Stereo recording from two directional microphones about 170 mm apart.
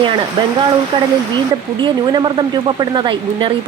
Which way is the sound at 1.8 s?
30° right (ahead or behind).